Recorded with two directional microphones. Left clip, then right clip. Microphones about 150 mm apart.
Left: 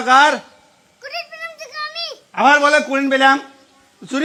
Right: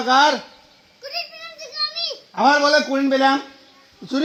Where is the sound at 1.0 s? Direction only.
10° left (ahead or behind).